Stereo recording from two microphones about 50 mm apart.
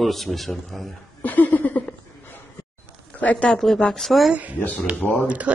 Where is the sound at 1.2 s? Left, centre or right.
Left.